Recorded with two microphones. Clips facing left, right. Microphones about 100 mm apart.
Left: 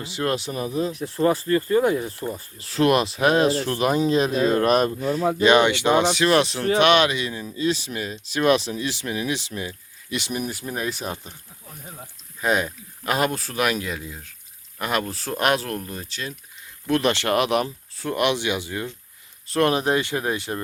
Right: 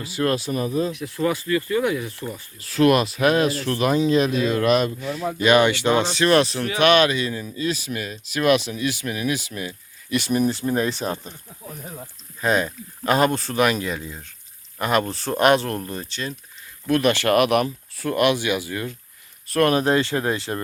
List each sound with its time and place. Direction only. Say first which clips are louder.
0.0 s speech: right 2 dB; 20° left (ahead or behind)
0.9 s speech: left 2 dB; 35° left (ahead or behind)
5.4 s speech: right 1 dB; 25° left (ahead or behind); by 11.1 s 5° left (ahead or behind)
12.4 s speech: right 1 dB; 10° left (ahead or behind)
16.9 s speech: right 2 dB; 25° left (ahead or behind)